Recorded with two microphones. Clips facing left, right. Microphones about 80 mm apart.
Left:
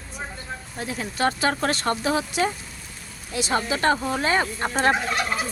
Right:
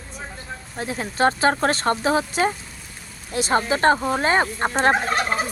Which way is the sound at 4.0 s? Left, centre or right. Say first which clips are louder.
Right 3 dB; centre.